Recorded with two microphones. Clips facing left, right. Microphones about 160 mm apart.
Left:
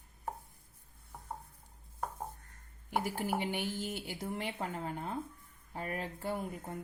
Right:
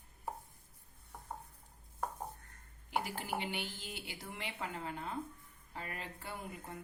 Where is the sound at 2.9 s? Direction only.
50° left (ahead or behind).